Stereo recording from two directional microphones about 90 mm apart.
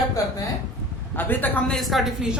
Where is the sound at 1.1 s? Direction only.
20° left (ahead or behind).